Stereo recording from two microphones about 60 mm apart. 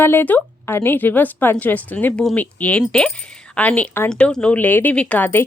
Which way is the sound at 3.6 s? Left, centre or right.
Left.